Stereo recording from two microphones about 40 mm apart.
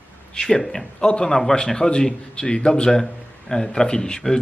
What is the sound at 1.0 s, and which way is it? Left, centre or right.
A man's voice, centre.